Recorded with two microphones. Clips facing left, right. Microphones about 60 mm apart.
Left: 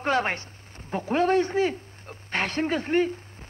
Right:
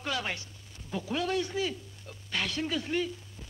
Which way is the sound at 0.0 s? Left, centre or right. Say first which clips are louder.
Left 9 dB; left.